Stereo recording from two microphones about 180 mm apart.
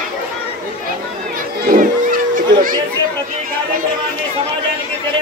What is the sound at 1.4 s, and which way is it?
Chatter, 50° right (ahead or behind).